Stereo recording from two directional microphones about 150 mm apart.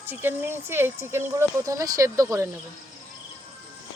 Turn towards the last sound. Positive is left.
turn(degrees=-20)  # may be behind; listen again after turning